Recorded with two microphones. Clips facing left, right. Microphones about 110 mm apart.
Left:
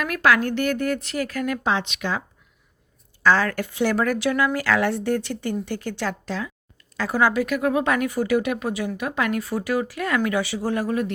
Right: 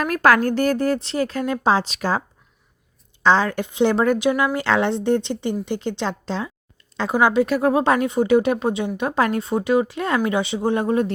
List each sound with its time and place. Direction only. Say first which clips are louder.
0.0 s speech: right 3 dB; 40° right (ahead or behind)
3.2 s a woman's voice: right 2 dB; 20° right (ahead or behind)
7.4 s a woman's voice: right 4 dB; 30° right (ahead or behind)